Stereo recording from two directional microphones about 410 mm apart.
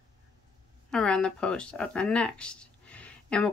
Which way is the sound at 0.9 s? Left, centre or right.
Centre.